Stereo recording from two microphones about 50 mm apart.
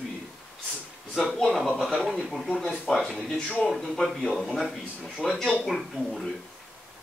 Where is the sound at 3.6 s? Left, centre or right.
Centre.